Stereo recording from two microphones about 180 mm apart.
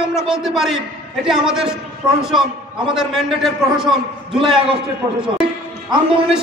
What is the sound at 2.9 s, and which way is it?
A man's voice, centre (ahead or behind).